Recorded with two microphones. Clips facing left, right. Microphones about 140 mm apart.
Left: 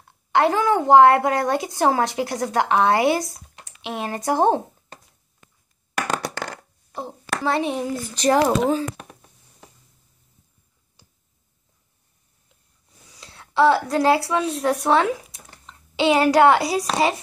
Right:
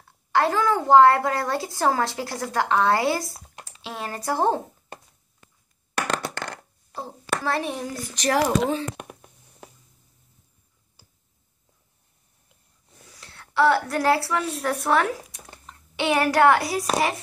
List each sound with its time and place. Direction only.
0.3 s a woman's voice: 20° left (ahead or behind)
6.9 s hands: 20° left (ahead or behind)
8.1 s speech: 30° left (ahead or behind)
8.5 s a child's voice: 5° left (ahead or behind)
13.2 s a woman's voice: 20° left (ahead or behind)